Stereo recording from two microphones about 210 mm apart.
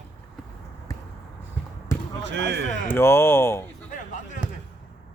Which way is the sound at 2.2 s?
60° right (ahead or behind).